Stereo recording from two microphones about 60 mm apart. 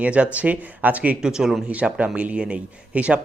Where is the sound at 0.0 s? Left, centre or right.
Right.